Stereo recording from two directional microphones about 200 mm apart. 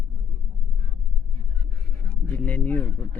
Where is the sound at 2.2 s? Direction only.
10° left (ahead or behind).